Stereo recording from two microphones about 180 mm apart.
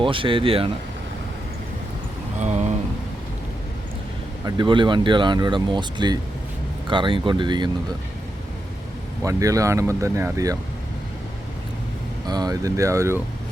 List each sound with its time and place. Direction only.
0.0 s speech: 30° right (ahead or behind)
2.4 s a sound: 40° right (ahead or behind)
4.4 s speech: 25° right (ahead or behind)
9.2 s speech: 20° right (ahead or behind)
12.2 s speech: 20° right (ahead or behind)